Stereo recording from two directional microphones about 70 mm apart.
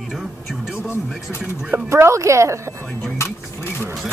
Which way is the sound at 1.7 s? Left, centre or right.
Right.